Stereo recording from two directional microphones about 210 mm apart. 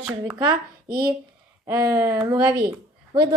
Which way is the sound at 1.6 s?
15° right (ahead or behind).